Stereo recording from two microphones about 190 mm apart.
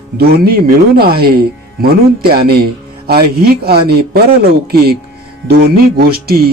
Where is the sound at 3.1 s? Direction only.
55° right (ahead or behind).